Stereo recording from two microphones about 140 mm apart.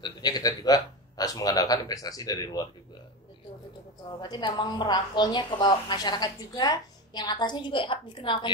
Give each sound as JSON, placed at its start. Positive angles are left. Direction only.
{"t": 0.0, "sound": "speech", "side_deg": 30}
{"t": 4.2, "sound": "a woman's voice", "side_deg": 30}